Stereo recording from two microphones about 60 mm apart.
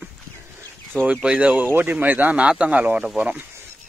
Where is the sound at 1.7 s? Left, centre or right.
Right.